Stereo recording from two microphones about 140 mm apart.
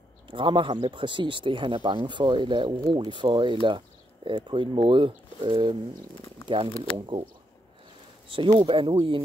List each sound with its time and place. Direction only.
0.3 s speech: 35° right (ahead or behind)
3.6 s a sound: 35° right (ahead or behind)
4.5 s speech: 35° right (ahead or behind)
6.8 s speech: 40° right (ahead or behind)
8.3 s speech: 35° right (ahead or behind)